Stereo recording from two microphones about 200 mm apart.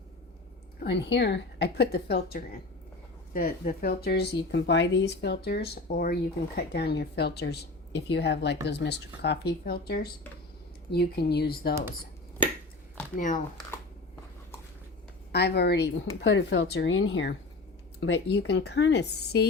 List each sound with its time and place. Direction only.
0.8 s speech: 60° left (ahead or behind)
13.1 s speech: 40° left (ahead or behind)
15.3 s speech: 55° left (ahead or behind)